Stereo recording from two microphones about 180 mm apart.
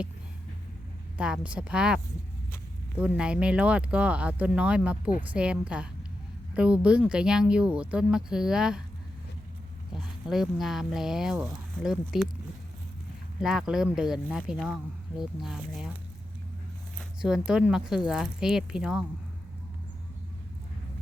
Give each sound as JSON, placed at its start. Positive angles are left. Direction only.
{"t": 1.2, "sound": "speech", "side_deg": -5}
{"t": 3.2, "sound": "speech", "side_deg": -5}
{"t": 10.2, "sound": "speech", "side_deg": 0}
{"t": 13.4, "sound": "speech", "side_deg": 0}
{"t": 17.0, "sound": "speech", "side_deg": -5}